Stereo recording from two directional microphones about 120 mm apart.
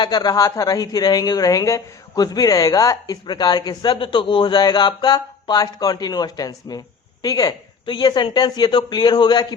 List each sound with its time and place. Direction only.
0.0 s speech: 35° left (ahead or behind)